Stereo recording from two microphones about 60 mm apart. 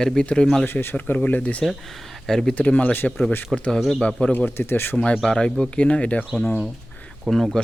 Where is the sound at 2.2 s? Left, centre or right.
Centre.